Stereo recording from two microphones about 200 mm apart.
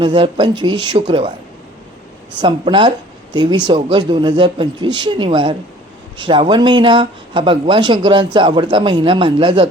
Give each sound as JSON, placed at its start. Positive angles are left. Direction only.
{"t": 0.0, "sound": "speech", "side_deg": -25}
{"t": 2.4, "sound": "speech", "side_deg": -25}